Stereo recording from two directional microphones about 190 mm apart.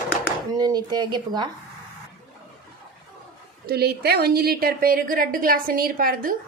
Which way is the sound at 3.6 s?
55° right (ahead or behind).